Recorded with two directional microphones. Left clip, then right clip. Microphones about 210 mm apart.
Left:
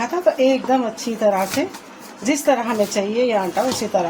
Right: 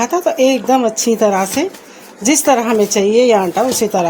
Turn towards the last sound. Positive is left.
turn(degrees=-50)  # may be behind; listen again after turning